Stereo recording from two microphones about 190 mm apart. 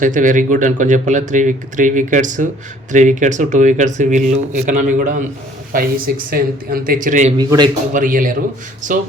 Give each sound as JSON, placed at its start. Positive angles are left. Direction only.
{"t": 0.0, "sound": "speech", "side_deg": -45}
{"t": 7.3, "sound": "a man's voice", "side_deg": -20}
{"t": 7.9, "sound": "speech", "side_deg": -45}